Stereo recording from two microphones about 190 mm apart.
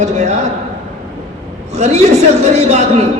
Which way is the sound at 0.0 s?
35° right (ahead or behind).